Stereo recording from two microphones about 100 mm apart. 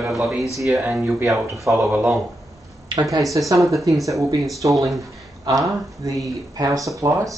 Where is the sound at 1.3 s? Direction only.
30° right (ahead or behind).